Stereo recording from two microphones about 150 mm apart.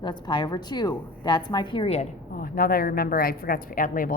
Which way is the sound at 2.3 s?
70° left (ahead or behind).